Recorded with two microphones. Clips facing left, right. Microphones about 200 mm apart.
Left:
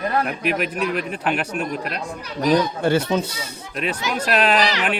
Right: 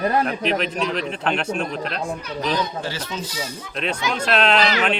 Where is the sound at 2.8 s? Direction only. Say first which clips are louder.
Left 10 dB; 60° left (ahead or behind).